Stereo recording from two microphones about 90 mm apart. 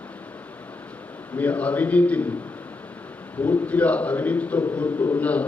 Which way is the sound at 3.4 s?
15° left (ahead or behind).